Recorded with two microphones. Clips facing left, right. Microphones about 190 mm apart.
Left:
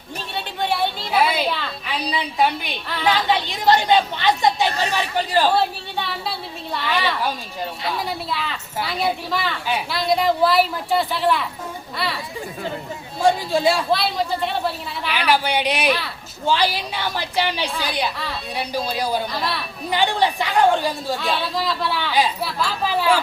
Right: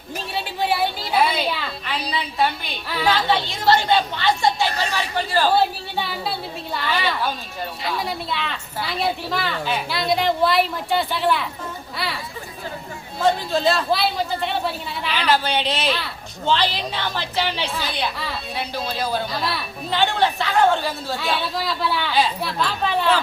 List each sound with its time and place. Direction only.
0.3 s a sound: 5° right (ahead or behind)
3.2 s a woman's voice: 20° left (ahead or behind)
5.5 s a sound: centre (ahead or behind)
6.7 s a woman's voice: centre (ahead or behind)
11.9 s a sound: centre (ahead or behind)
13.2 s a woman's voice: 10° left (ahead or behind)
13.9 s a woman's voice: centre (ahead or behind)
15.1 s a woman's voice: 10° left (ahead or behind)
19.4 s a woman's voice: centre (ahead or behind)
19.9 s a woman's voice: 15° left (ahead or behind)
21.2 s a woman's voice: centre (ahead or behind)